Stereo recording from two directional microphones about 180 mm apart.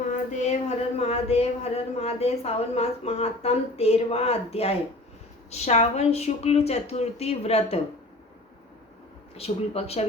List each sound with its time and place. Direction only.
0.1 s a sound: 40° left (ahead or behind)
5.5 s a woman's voice: 35° left (ahead or behind)
9.3 s a woman's voice: 35° left (ahead or behind)